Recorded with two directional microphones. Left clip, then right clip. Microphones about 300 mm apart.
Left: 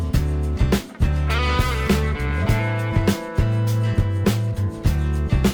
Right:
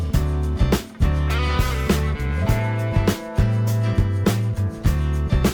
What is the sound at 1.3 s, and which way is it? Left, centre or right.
Music, centre.